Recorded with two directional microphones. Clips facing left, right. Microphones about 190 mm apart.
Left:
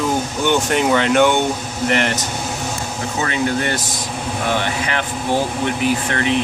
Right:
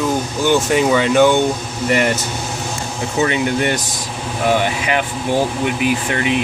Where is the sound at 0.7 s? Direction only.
5° right (ahead or behind).